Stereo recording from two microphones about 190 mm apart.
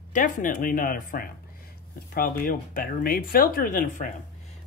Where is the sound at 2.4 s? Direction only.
45° left (ahead or behind).